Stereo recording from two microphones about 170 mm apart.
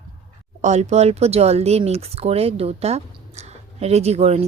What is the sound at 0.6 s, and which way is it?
Speech, 40° right (ahead or behind).